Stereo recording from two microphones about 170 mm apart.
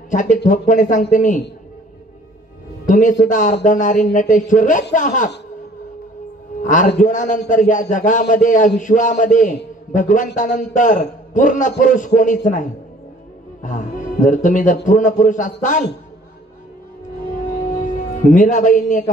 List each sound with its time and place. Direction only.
0.1 s a man's voice: 50° left (ahead or behind)
2.9 s a man's voice: 50° left (ahead or behind)
6.6 s a man's voice: 50° left (ahead or behind)
17.8 s speech: 50° left (ahead or behind)